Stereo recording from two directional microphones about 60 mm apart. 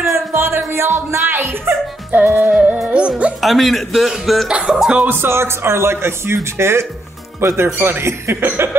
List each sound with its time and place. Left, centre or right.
0.1 s music: right
2.9 s music: centre
3.4 s a man's voice: centre
4.5 s music: centre
5.0 s speech: right